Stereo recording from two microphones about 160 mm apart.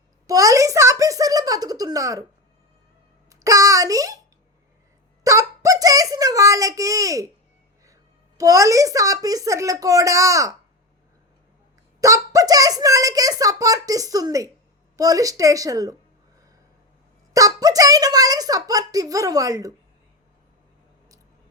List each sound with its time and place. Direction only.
0.3 s a child's voice: 20° right (ahead or behind)
3.2 s a sound: 20° right (ahead or behind)
5.2 s a sound: 20° right (ahead or behind)
8.4 s a child's voice: 20° right (ahead or behind)
11.9 s a child's voice: 20° right (ahead or behind)
17.3 s a child's voice: 25° right (ahead or behind)